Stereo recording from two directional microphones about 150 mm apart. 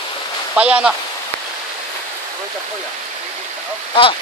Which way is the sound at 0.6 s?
10° right (ahead or behind).